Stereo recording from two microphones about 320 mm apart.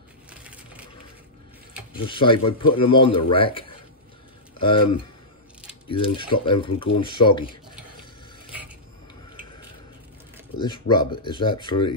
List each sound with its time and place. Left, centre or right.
0.3 s crushing: centre
2.0 s speech: centre
5.9 s speech: centre
10.6 s speech: centre